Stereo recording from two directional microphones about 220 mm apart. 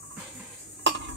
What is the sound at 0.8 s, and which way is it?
Cough, 55° right (ahead or behind).